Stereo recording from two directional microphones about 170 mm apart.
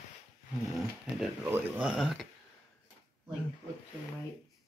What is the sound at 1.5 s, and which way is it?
Speech, 5° right (ahead or behind).